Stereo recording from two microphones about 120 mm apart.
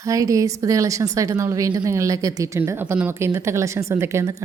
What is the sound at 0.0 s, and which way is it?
A woman's voice, 30° right (ahead or behind).